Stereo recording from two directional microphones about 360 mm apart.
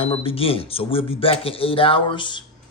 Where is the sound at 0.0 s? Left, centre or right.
Centre.